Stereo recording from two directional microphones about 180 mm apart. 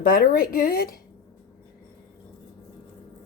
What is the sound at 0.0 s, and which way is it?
Speech, 55° left (ahead or behind).